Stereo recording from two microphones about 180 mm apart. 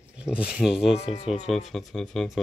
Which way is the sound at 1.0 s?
35° left (ahead or behind).